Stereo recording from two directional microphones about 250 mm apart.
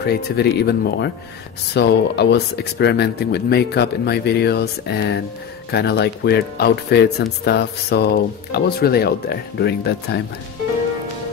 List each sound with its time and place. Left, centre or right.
0.0 s speech: left